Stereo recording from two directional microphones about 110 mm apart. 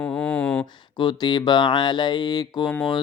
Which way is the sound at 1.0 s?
45° left (ahead or behind).